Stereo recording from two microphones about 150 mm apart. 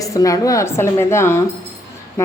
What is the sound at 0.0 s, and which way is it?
Speech, 20° left (ahead or behind).